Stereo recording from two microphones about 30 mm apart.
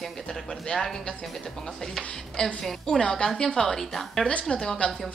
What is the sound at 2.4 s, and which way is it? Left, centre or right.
Speech, left.